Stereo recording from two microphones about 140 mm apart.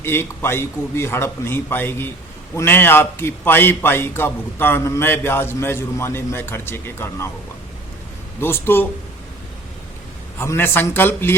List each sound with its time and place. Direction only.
0.0 s a man's voice: 15° left (ahead or behind)
8.4 s a man's voice: 15° left (ahead or behind)
10.3 s a man's voice: 20° left (ahead or behind)